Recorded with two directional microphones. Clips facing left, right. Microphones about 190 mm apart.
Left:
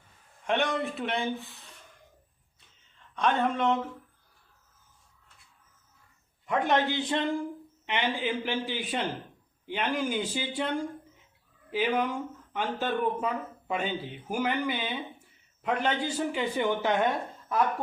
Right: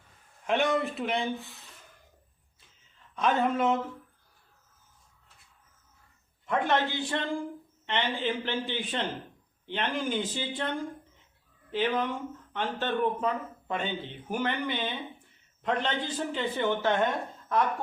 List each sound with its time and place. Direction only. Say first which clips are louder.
0.4 s speech: right 2 dB; centre (ahead or behind)
3.2 s speech: right 1 dB; 5° right (ahead or behind)
6.5 s speech: left 1 dB; 15° left (ahead or behind)